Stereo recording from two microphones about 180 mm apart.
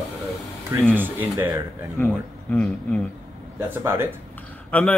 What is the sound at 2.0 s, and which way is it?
Speech, 5° left (ahead or behind).